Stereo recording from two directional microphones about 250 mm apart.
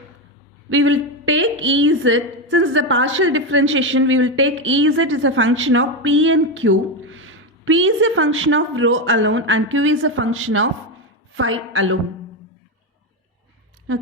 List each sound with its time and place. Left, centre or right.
0.7 s a woman's voice: right